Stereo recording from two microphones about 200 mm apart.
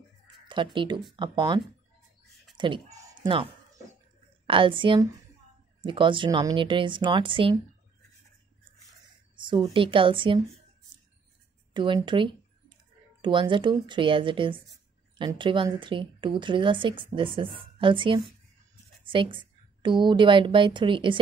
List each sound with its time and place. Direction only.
0.5 s speech: 25° right (ahead or behind)
2.5 s a sound: 25° right (ahead or behind)
4.5 s speech: 25° right (ahead or behind)
9.4 s speech: 25° right (ahead or behind)
11.7 s a sound: 25° right (ahead or behind)
13.2 s a woman's voice: 25° right (ahead or behind)